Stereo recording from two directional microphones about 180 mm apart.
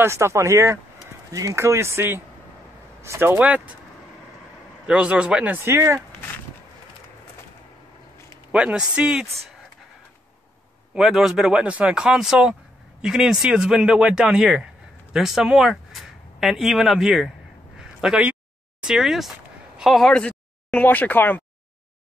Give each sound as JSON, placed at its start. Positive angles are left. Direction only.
{"t": 0.0, "sound": "speech", "side_deg": -15}
{"t": 4.8, "sound": "speech", "side_deg": -5}
{"t": 8.5, "sound": "a man's voice", "side_deg": -5}
{"t": 11.0, "sound": "a man's voice", "side_deg": 0}
{"t": 17.7, "sound": "a sound", "side_deg": -5}
{"t": 19.8, "sound": "speech", "side_deg": 0}